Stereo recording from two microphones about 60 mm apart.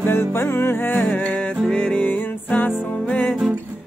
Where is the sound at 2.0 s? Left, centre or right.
Left.